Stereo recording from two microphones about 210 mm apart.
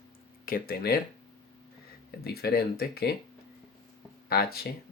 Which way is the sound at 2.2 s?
45° left (ahead or behind).